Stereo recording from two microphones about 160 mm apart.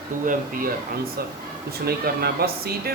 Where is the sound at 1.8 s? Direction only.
75° right (ahead or behind).